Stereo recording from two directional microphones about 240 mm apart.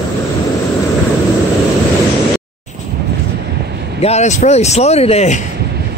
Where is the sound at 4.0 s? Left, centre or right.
Left.